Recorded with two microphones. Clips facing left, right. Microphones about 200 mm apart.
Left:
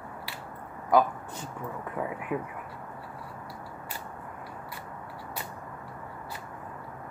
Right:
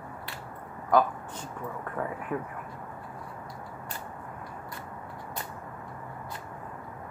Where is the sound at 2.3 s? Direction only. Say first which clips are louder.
Left 1 dB; 10° left (ahead or behind).